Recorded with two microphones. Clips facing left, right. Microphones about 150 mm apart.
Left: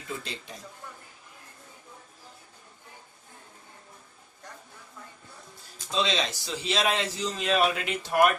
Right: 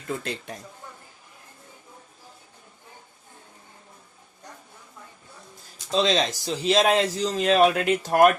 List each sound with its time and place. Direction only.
0.1 s speech: 50° right (ahead or behind)
5.9 s a man's voice: 40° right (ahead or behind)